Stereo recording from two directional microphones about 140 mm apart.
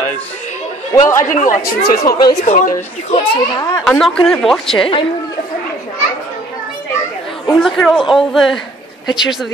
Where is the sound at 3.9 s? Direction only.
5° left (ahead or behind).